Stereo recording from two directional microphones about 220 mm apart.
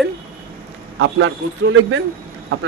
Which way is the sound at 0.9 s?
60° right (ahead or behind).